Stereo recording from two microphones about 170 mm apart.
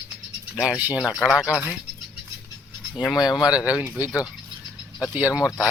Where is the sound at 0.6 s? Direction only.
5° right (ahead or behind).